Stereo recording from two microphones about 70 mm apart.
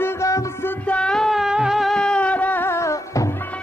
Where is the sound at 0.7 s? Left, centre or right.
Centre.